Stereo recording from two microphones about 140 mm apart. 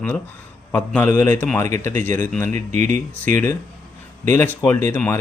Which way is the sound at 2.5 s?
60° right (ahead or behind).